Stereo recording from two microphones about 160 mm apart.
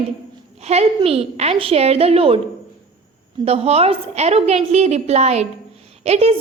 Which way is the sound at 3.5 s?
40° right (ahead or behind).